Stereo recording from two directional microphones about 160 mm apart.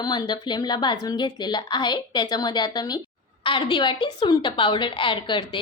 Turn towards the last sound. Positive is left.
turn(degrees=30)  # may be behind; listen again after turning